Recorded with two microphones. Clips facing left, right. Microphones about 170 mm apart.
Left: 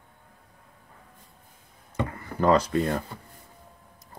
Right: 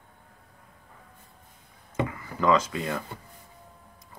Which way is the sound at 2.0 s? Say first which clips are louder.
Left 2 dB; 50° left (ahead or behind).